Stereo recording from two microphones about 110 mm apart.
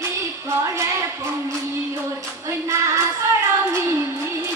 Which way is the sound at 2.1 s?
30° right (ahead or behind).